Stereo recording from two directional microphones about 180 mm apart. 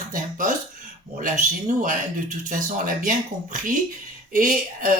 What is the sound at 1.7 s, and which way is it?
Speech, 45° right (ahead or behind).